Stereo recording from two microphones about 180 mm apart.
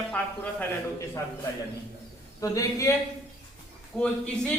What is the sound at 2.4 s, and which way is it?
Speech, 20° left (ahead or behind).